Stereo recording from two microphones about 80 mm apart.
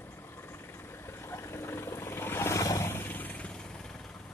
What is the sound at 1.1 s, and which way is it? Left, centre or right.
Vehicle, left.